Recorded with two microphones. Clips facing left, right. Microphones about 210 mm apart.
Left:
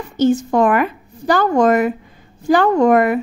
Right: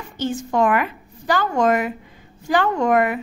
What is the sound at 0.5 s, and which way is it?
A woman's voice, 40° left (ahead or behind).